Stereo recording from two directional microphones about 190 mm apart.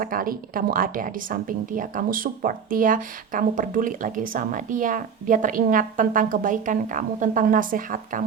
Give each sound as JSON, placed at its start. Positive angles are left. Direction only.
{"t": 0.0, "sound": "a woman's voice", "side_deg": -45}